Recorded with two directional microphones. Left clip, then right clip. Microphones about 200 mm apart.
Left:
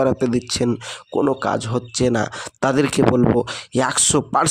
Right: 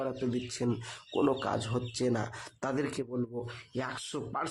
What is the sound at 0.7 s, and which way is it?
Speech, 35° left (ahead or behind).